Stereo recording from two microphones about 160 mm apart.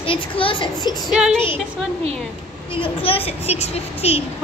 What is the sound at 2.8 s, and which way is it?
A woman's voice, 35° left (ahead or behind).